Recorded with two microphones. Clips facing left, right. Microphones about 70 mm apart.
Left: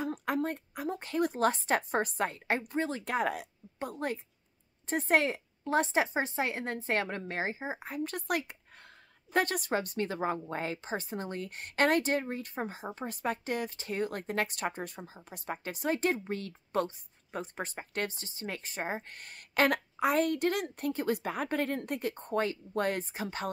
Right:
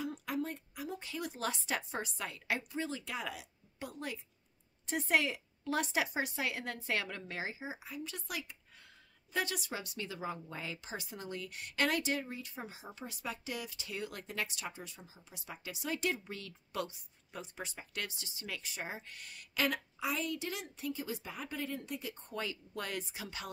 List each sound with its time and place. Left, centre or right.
0.0 s a woman's voice: left